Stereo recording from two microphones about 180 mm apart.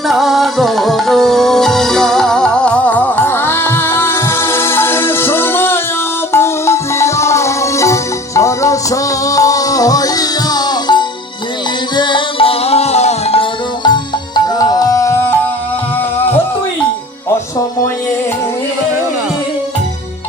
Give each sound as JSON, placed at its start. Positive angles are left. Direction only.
{"t": 0.1, "sound": "music", "side_deg": 0}